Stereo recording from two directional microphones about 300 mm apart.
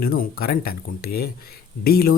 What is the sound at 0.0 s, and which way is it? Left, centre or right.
Speech, left.